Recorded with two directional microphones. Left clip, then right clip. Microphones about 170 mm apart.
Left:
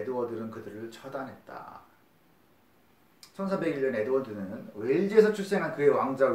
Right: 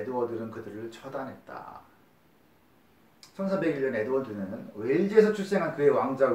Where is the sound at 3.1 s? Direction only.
30° left (ahead or behind).